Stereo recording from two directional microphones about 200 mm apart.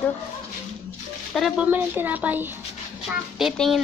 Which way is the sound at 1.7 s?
10° right (ahead or behind).